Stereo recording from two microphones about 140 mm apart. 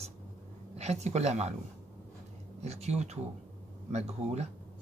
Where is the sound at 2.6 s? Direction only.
50° right (ahead or behind).